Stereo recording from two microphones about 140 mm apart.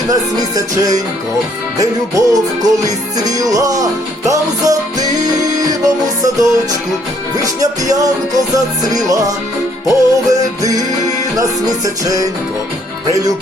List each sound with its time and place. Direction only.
0.1 s music: 25° right (ahead or behind)
6.2 s music: 25° right (ahead or behind)
12.0 s music: 25° right (ahead or behind)